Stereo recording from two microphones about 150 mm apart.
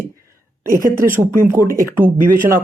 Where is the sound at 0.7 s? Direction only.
65° right (ahead or behind).